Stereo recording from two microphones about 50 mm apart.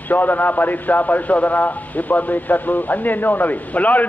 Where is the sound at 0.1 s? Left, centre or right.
Left.